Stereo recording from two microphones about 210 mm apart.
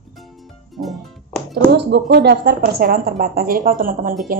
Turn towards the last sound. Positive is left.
turn(degrees=-45)  # may be behind; listen again after turning